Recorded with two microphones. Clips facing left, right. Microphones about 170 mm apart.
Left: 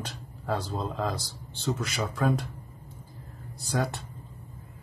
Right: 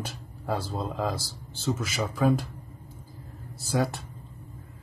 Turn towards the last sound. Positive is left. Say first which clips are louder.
# right 3 dB
turn(degrees=-5)  # may be behind; listen again after turning